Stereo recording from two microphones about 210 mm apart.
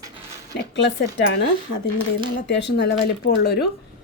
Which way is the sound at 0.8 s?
55° left (ahead or behind).